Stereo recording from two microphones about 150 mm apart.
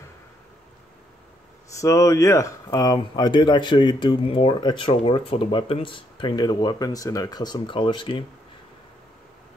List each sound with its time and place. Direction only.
1.8 s speech: 20° left (ahead or behind)